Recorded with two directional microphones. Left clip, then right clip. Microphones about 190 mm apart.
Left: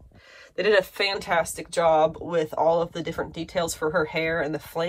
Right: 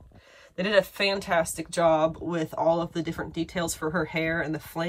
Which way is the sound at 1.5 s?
45° left (ahead or behind).